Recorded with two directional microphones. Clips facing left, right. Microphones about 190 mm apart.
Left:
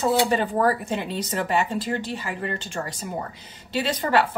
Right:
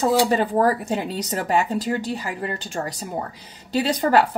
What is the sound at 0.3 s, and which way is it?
Speech, 40° right (ahead or behind).